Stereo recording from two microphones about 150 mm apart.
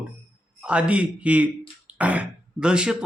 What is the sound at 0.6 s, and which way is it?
Speech, 10° right (ahead or behind).